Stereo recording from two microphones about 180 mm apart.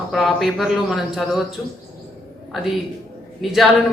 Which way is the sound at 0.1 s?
Centre (ahead or behind).